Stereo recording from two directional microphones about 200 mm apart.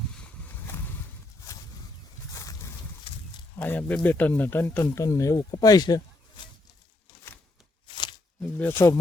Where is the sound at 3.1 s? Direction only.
30° left (ahead or behind).